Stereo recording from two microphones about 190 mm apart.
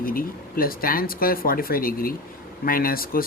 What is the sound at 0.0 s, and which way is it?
Speech, 50° left (ahead or behind).